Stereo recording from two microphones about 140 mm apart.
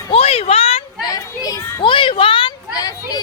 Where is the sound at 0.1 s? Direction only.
45° left (ahead or behind).